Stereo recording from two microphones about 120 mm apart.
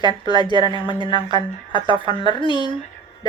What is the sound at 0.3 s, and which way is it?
Speech, 40° right (ahead or behind).